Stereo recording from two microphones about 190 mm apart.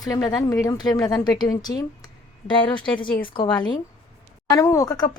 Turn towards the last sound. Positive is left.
turn(degrees=15)  # may be behind; listen again after turning